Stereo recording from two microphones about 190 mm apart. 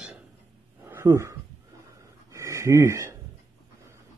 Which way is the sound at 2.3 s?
15° right (ahead or behind).